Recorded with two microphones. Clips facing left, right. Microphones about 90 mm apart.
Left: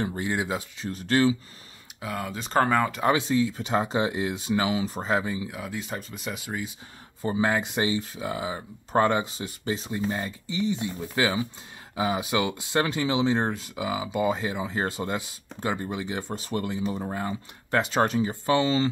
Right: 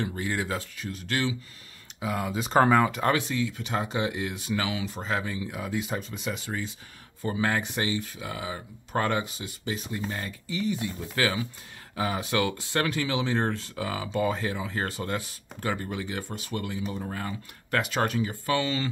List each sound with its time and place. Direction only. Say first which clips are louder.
0.0 s speech: left 2 dB; 20° left (ahead or behind)
0.8 s speech: left 8 dB; 35° left (ahead or behind)
2.0 s speech: right 3 dB; 5° right (ahead or behind)
3.3 s speech: left 5 dB; 35° left (ahead or behind)
5.1 s speech: left 4 dB; 20° left (ahead or behind)
5.5 s speech: right 2 dB; centre (ahead or behind)
7.2 s speech: left 3 dB; 20° left (ahead or behind)
16.3 s speech: left 4 dB; 35° left (ahead or behind)